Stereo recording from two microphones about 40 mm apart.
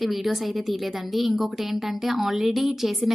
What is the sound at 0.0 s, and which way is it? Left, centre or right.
A woman's voice, centre.